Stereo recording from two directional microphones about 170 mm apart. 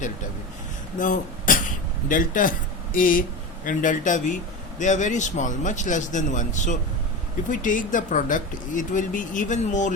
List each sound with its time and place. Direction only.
0.9 s speech: 50° left (ahead or behind)